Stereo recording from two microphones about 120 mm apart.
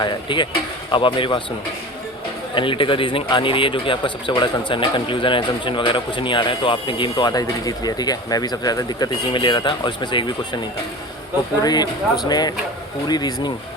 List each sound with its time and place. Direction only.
0.0 s speech: 40° left (ahead or behind)
2.6 s speech: 45° left (ahead or behind)
11.6 s speech: 35° left (ahead or behind)